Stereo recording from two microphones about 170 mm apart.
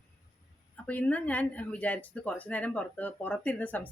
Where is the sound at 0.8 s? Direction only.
10° left (ahead or behind).